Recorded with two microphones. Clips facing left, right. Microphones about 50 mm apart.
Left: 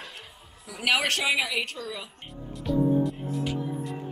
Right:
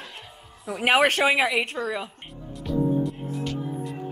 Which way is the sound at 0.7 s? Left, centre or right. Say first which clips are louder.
Right 6 dB; right.